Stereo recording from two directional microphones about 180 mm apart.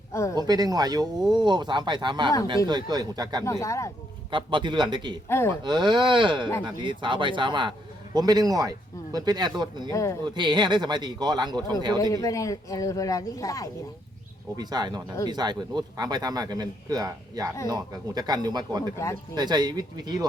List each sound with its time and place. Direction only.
0.1 s a sound: 15° left (ahead or behind)
0.3 s speech: 20° right (ahead or behind)
3.4 s speech: 15° left (ahead or behind)
4.3 s speech: 25° right (ahead or behind)
5.3 s speech: 15° left (ahead or behind)
5.6 s speech: 25° right (ahead or behind)
9.9 s speech: 15° left (ahead or behind)
10.2 s speech: 25° right (ahead or behind)
12.1 s speech: 20° left (ahead or behind)
14.5 s speech: 20° right (ahead or behind)